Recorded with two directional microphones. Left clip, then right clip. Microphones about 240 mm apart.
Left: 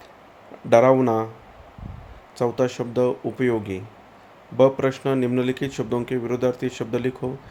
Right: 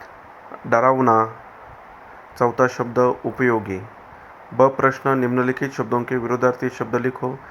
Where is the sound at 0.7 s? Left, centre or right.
Centre.